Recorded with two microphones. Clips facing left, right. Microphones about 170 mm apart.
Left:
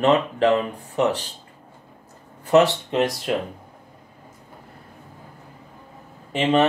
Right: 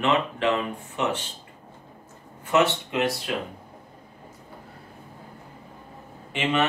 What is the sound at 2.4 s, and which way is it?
Speech, 35° left (ahead or behind).